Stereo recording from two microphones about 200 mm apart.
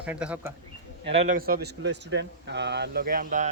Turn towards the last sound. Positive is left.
turn(degrees=-40)  # may be behind; listen again after turning